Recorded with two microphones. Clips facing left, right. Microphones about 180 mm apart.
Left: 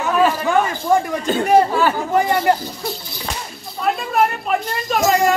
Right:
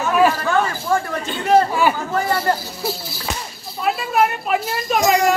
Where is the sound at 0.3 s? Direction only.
15° left (ahead or behind).